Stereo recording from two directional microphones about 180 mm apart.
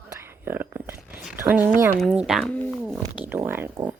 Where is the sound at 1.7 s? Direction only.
15° right (ahead or behind).